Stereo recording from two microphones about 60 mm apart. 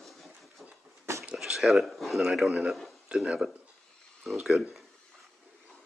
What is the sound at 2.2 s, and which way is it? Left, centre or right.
Speech, centre.